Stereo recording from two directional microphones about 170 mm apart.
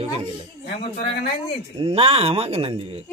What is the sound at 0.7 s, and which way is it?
Speech, 70° left (ahead or behind).